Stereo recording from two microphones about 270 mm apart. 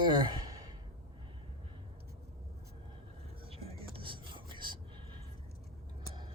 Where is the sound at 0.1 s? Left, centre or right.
Centre.